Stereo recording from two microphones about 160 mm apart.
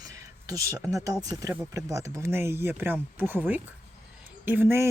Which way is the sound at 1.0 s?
20° right (ahead or behind).